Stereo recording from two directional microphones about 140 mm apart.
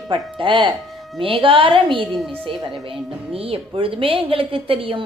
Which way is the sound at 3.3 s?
40° right (ahead or behind).